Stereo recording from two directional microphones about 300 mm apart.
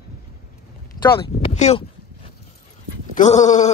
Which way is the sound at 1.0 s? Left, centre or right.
Centre.